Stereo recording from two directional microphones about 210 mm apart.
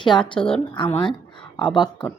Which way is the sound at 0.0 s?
20° left (ahead or behind).